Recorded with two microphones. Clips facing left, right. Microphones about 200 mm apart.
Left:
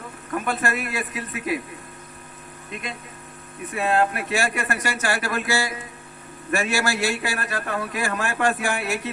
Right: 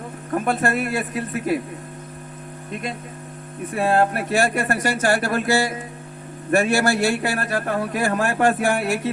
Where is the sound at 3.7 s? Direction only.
45° right (ahead or behind).